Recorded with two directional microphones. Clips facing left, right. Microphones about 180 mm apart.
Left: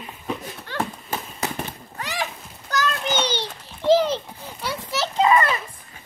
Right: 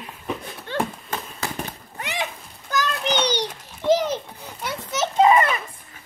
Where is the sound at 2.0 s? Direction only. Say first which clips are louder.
Even; 20° right (ahead or behind).